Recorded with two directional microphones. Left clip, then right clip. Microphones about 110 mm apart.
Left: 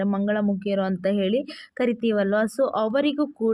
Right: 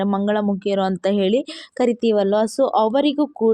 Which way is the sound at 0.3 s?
40° right (ahead or behind).